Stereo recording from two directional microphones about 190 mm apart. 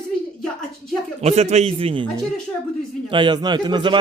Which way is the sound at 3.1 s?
25° right (ahead or behind).